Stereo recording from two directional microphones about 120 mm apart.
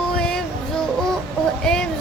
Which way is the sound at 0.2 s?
5° left (ahead or behind).